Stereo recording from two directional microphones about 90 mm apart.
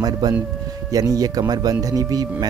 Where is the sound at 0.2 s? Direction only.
45° right (ahead or behind).